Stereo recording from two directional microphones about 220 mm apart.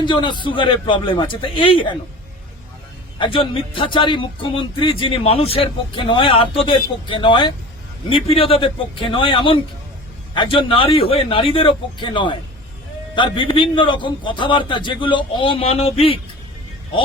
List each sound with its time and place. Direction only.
0.0 s speech: 20° left (ahead or behind)
3.2 s speech: 25° left (ahead or behind)